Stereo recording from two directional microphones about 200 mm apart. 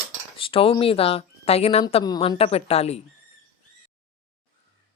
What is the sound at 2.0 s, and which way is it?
Speech, 20° left (ahead or behind).